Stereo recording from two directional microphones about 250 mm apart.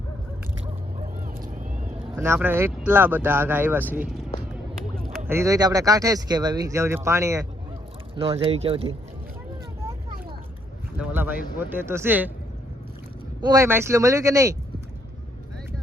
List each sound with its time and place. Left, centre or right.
0.6 s a sound: right
2.1 s speech: centre
5.3 s speech: centre
8.1 s speech: right
10.9 s speech: centre
13.4 s speech: centre